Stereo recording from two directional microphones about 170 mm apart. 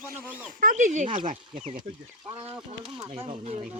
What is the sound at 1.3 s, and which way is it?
Speech, 45° right (ahead or behind).